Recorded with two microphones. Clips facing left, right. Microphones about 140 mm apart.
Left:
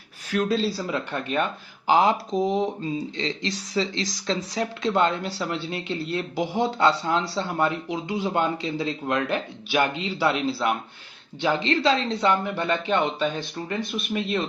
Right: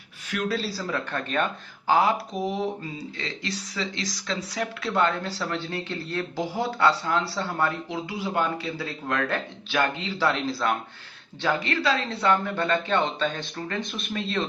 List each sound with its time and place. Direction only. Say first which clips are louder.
0.3 s speech: left 5 dB; 25° left (ahead or behind)